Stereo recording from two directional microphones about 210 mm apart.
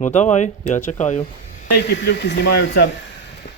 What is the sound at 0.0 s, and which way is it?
Speech, 35° left (ahead or behind).